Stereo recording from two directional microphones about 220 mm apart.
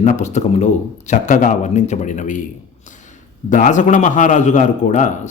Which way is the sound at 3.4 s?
35° left (ahead or behind).